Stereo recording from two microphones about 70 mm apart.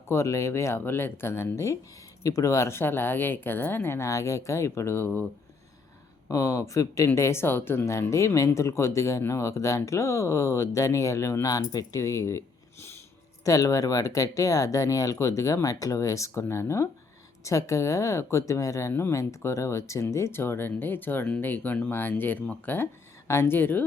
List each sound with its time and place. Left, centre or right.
0.1 s speech: left
6.2 s speech: left
7.1 s speech: left
7.9 s speech: left
13.4 s speech: left